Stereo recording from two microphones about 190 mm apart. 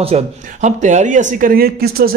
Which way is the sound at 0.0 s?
35° right (ahead or behind).